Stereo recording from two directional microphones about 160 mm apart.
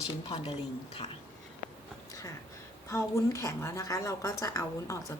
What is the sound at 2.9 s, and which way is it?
A woman's voice, 20° left (ahead or behind).